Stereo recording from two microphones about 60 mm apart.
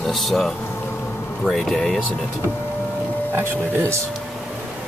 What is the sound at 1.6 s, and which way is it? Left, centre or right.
Speech, centre.